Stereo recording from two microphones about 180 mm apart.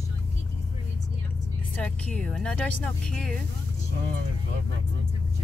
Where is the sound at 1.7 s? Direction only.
10° left (ahead or behind).